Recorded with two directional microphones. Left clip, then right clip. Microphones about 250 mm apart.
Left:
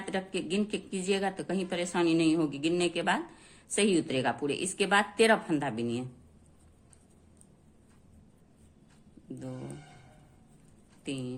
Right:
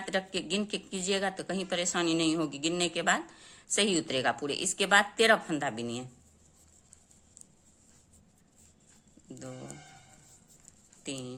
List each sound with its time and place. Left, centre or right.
0.0 s a woman's voice: right
11.0 s speech: centre